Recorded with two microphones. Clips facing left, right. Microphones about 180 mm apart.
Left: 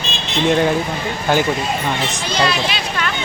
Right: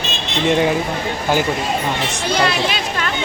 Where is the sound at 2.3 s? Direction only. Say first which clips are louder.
Right 2 dB; 55° right (ahead or behind).